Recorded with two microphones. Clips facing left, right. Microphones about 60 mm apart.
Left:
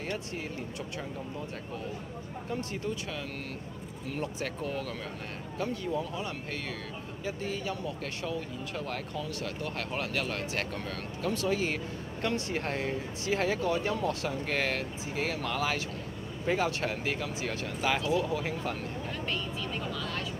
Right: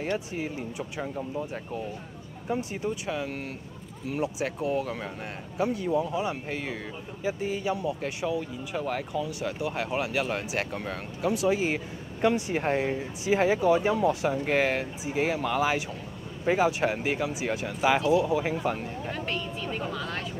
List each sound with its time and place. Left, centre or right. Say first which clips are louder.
0.0 s speech: right 6 dB; centre
2.5 s speech: right 5 dB; centre; by 20.2 s right